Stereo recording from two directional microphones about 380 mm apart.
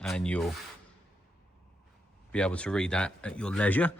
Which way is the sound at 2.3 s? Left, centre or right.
Centre.